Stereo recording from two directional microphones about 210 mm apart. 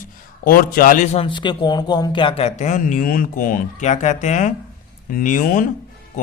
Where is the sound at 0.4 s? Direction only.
40° left (ahead or behind).